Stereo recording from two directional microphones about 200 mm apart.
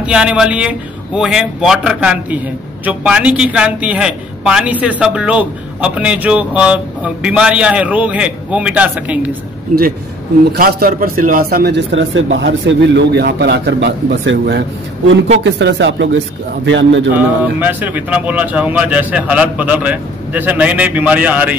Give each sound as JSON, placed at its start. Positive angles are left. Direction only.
{"t": 0.0, "sound": "a man's voice", "side_deg": -5}
{"t": 10.5, "sound": "a man's voice", "side_deg": -50}
{"t": 17.4, "sound": "speech", "side_deg": -10}